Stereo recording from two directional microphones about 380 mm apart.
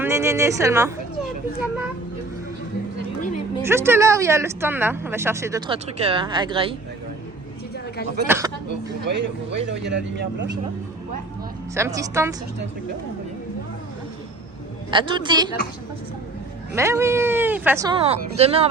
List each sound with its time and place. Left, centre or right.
0.0 s speech: centre
3.2 s a sound: centre
3.6 s speech: centre
8.3 s speech: centre
9.0 s speech: right
11.9 s speech: centre
14.8 s speech: centre
16.7 s speech: centre